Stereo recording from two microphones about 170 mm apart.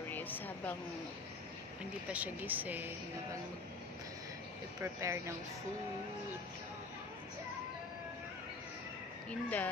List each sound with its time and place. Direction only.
0.1 s a woman's voice: 10° left (ahead or behind)
2.0 s speech: 10° right (ahead or behind)
4.8 s speech: 15° right (ahead or behind)
9.3 s speech: 10° left (ahead or behind)